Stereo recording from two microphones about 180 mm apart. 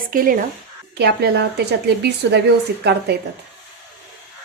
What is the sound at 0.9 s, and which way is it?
A woman's voice, 65° right (ahead or behind).